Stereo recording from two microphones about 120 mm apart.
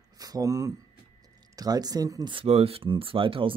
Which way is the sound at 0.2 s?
30° right (ahead or behind).